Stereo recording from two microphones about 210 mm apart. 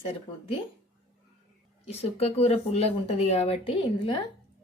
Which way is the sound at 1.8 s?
30° left (ahead or behind).